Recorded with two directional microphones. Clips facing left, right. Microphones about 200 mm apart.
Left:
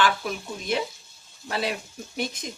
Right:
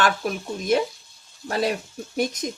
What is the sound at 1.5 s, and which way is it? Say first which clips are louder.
Speech: right 5 dB; 45° right (ahead or behind).